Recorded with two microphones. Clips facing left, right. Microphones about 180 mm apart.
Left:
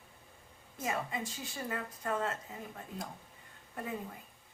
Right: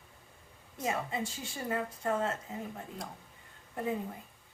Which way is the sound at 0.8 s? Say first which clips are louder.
Right 2 dB; 25° right (ahead or behind).